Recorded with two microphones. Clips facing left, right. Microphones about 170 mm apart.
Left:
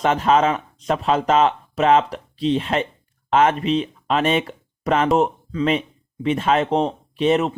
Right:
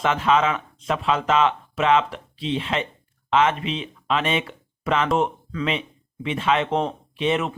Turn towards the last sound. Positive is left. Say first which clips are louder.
# left 5 dB
turn(degrees=40)  # may be behind; listen again after turning